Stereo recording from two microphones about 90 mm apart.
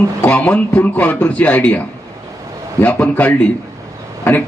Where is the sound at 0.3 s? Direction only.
15° left (ahead or behind).